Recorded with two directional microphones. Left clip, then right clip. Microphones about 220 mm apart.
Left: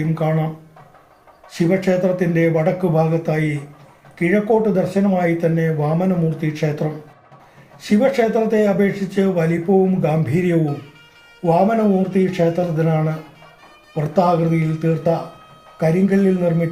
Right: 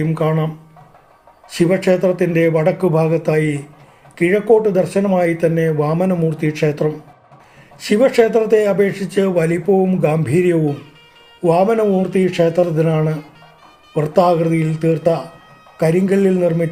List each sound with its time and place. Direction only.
0.1 s speech: 50° right (ahead or behind)
1.5 s speech: 50° right (ahead or behind)